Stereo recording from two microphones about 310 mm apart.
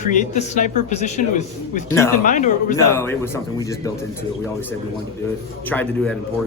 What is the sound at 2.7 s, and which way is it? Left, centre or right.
A man's voice, centre.